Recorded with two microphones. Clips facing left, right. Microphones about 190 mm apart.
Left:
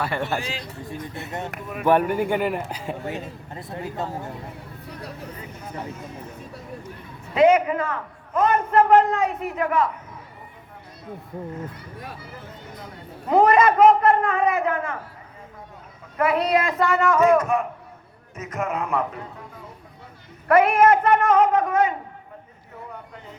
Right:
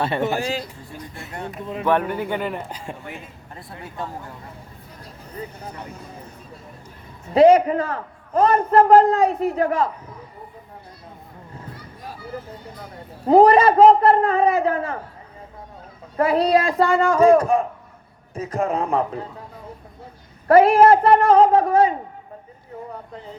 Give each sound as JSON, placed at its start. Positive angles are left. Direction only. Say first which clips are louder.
{"t": 0.3, "sound": "a man's voice", "louder": "right 5 dB", "side_deg": -40}
{"t": 1.8, "sound": "speech", "louder": "left 2 dB", "side_deg": 10}
{"t": 3.5, "sound": "speech", "louder": "left 3 dB", "side_deg": 20}
{"t": 4.9, "sound": "a sound", "louder": "left 10 dB", "side_deg": 70}
{"t": 7.3, "sound": "a man's voice", "louder": "right 4 dB", "side_deg": -35}
{"t": 13.2, "sound": "a man's voice", "louder": "right 4 dB", "side_deg": -30}
{"t": 16.1, "sound": "a man's voice", "louder": "right 3 dB", "side_deg": -30}
{"t": 20.5, "sound": "a man's voice", "louder": "right 4 dB", "side_deg": -30}